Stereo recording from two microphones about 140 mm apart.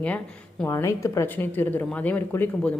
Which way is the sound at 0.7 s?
20° left (ahead or behind).